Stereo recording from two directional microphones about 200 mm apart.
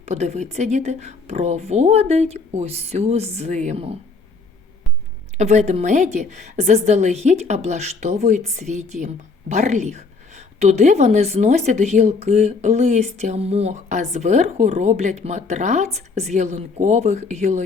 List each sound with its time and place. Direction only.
0.0 s a woman's voice: 35° right (ahead or behind)
5.4 s a woman's voice: 35° right (ahead or behind)